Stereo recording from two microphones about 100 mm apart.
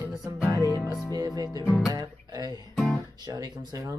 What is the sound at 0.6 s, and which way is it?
Music, 30° left (ahead or behind).